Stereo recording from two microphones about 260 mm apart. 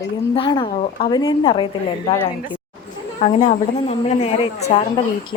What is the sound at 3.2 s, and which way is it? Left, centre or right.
A woman's voice, left.